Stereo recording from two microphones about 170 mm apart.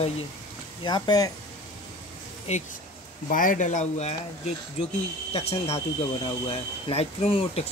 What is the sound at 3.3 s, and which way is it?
Speech, 55° left (ahead or behind).